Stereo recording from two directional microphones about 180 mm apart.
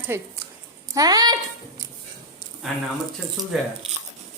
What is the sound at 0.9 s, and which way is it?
Speech, 20° right (ahead or behind).